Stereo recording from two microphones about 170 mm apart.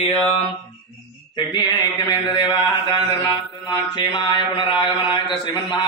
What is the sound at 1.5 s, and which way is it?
Mantra, 25° left (ahead or behind).